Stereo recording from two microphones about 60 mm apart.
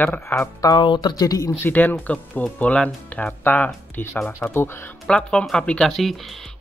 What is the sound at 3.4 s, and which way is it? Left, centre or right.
Speech, left.